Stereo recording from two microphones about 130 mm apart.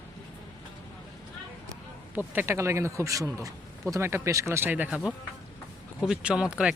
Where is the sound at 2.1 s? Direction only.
15° right (ahead or behind).